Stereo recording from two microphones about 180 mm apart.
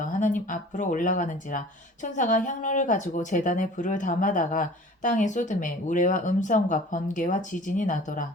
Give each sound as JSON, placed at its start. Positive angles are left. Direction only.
{"t": 0.0, "sound": "speech", "side_deg": 45}